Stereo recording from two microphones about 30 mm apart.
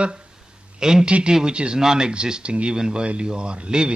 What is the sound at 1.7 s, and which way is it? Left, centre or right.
Speech, right.